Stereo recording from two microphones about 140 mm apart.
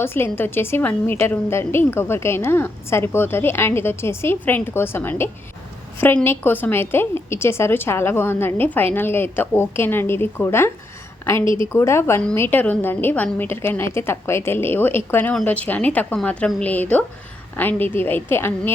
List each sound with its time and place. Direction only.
0.0 s a woman's voice: 15° left (ahead or behind)
11.7 s a woman's voice: 20° left (ahead or behind)